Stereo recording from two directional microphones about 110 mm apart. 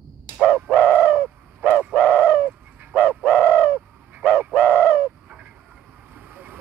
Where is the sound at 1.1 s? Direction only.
15° right (ahead or behind).